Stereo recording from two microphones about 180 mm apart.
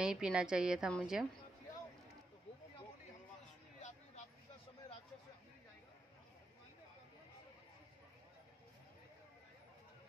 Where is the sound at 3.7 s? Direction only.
40° left (ahead or behind).